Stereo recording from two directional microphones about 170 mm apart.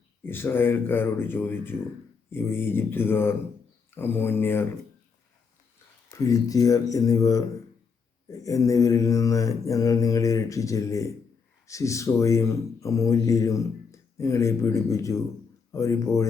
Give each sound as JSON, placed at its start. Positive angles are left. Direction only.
{"t": 0.2, "sound": "speech", "side_deg": 10}
{"t": 6.1, "sound": "mantra", "side_deg": 20}
{"t": 11.6, "sound": "speech", "side_deg": 20}
{"t": 15.7, "sound": "mantra", "side_deg": 20}